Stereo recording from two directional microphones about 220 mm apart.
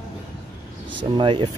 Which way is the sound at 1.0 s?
20° right (ahead or behind).